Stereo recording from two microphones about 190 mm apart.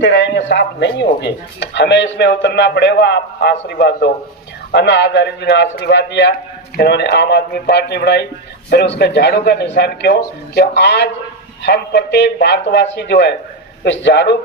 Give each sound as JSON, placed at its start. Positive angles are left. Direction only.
{"t": 0.0, "sound": "a man's voice", "side_deg": 70}